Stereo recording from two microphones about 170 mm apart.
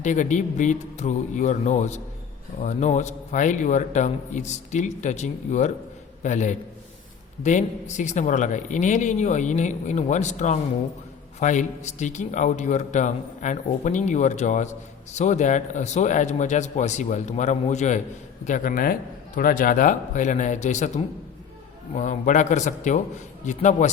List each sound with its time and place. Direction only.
0.0 s a man's voice: 45° left (ahead or behind)